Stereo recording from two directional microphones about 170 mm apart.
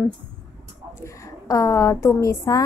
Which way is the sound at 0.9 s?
20° left (ahead or behind).